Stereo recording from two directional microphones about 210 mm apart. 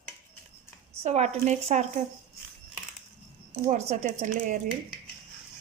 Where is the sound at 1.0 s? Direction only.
30° right (ahead or behind).